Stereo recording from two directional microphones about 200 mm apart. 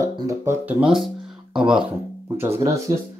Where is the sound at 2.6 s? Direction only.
15° right (ahead or behind).